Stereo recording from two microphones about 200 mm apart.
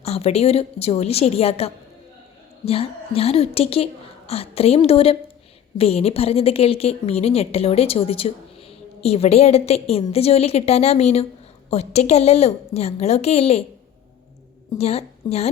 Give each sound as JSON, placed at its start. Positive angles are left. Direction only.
{"t": 0.0, "sound": "a woman's voice", "side_deg": 30}
{"t": 14.8, "sound": "a woman's voice", "side_deg": 30}